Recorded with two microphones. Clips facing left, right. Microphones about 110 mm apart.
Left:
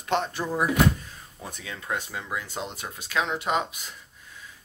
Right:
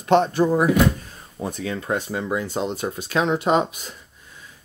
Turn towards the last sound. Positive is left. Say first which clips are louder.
# right 7 dB
turn(degrees=-30)  # may be behind; listen again after turning